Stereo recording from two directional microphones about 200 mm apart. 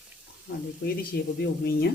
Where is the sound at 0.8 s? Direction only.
55° left (ahead or behind).